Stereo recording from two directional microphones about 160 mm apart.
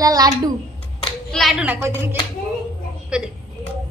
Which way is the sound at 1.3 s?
Centre (ahead or behind).